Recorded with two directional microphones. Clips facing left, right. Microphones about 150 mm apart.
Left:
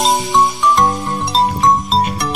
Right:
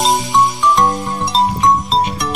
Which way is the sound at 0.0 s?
Centre (ahead or behind).